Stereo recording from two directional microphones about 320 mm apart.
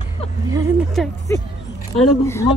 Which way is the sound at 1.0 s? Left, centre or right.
Centre.